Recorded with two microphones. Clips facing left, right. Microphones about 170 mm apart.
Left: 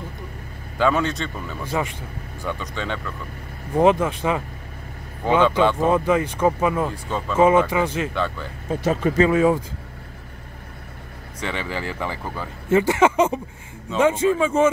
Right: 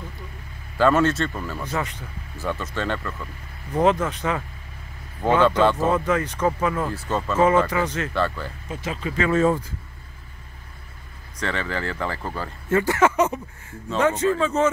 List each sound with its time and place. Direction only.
0.7 s speech: centre (ahead or behind)
1.6 s speech: 10° left (ahead or behind)
2.4 s speech: 5° right (ahead or behind)
3.7 s speech: 10° left (ahead or behind)
5.8 s speech: 15° left (ahead or behind)
7.1 s speech: centre (ahead or behind)
7.3 s speech: 10° left (ahead or behind)
8.1 s speech: centre (ahead or behind)
8.6 s speech: 45° left (ahead or behind)
9.3 s speech: 10° left (ahead or behind)
11.3 s speech: 10° left (ahead or behind)
13.1 s a sound: 25° left (ahead or behind)
13.8 s speech: 10° left (ahead or behind)